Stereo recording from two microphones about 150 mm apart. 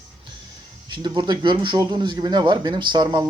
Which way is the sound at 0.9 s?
30° right (ahead or behind).